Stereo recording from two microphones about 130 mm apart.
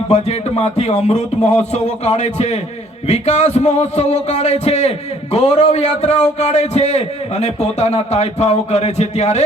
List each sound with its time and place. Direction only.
0.1 s music: 55° left (ahead or behind)